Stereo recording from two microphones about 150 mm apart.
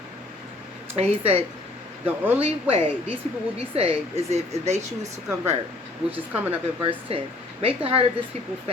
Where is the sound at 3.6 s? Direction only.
40° right (ahead or behind).